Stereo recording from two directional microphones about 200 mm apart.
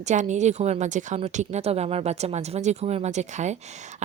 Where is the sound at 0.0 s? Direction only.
35° right (ahead or behind).